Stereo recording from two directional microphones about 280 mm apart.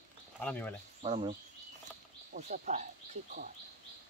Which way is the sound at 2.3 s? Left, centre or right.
Right.